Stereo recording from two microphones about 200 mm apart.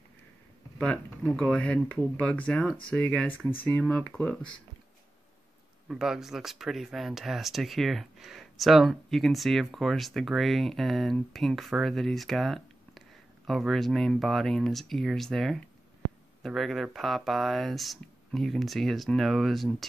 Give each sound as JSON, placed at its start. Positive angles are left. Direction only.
{"t": 0.7, "sound": "speech", "side_deg": 5}
{"t": 5.9, "sound": "speech", "side_deg": 0}